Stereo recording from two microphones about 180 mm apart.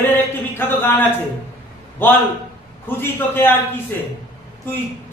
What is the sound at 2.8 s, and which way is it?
Speech, 10° left (ahead or behind).